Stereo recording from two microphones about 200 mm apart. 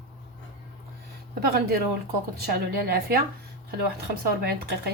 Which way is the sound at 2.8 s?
50° right (ahead or behind).